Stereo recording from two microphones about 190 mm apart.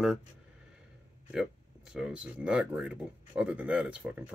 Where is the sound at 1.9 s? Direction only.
5° right (ahead or behind).